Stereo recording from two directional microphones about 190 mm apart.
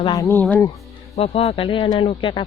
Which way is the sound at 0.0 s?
20° left (ahead or behind).